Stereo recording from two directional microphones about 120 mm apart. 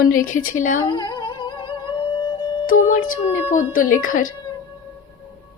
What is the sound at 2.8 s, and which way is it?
A woman's voice, 90° left.